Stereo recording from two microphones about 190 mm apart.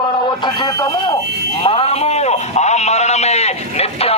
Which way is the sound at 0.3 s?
20° left (ahead or behind).